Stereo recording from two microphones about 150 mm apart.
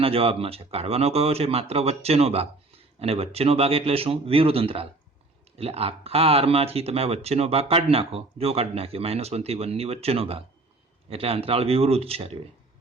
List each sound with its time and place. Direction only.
0.0 s speech: 40° right (ahead or behind)